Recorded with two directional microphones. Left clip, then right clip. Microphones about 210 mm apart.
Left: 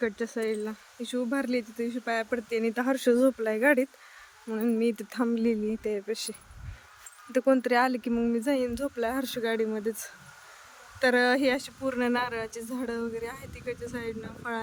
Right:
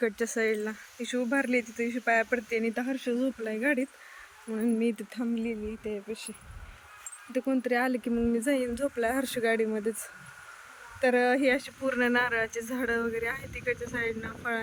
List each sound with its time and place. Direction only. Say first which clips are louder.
0.0 s speech: right 2 dB; 5° right (ahead or behind); by 3.0 s 15° left (ahead or behind)
3.0 s speech: left 10 dB; 25° left (ahead or behind)
3.4 s speech: left 5 dB; 15° left (ahead or behind)
7.3 s speech: left 6 dB; 15° left (ahead or behind)
7.7 s speech: left 3 dB; 5° left (ahead or behind)
11.0 s speech: left 1 dB; centre (ahead or behind)